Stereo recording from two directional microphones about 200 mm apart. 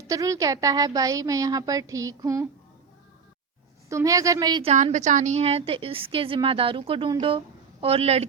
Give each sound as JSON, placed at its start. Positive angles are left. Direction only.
{"t": 0.1, "sound": "a woman's voice", "side_deg": -15}
{"t": 3.8, "sound": "a woman's voice", "side_deg": -15}
{"t": 4.7, "sound": "a woman's voice", "side_deg": -35}